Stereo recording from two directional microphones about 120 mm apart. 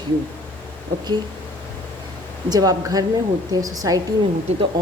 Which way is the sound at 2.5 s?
30° right (ahead or behind).